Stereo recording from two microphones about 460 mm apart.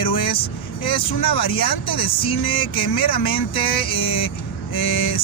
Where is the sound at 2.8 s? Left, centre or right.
Left.